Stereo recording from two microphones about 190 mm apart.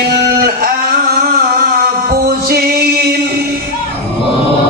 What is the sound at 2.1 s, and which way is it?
Music, 50° right (ahead or behind).